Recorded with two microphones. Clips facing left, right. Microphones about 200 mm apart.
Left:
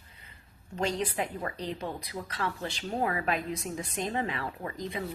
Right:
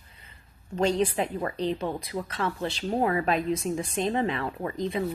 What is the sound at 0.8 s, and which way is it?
A woman's voice, 25° right (ahead or behind).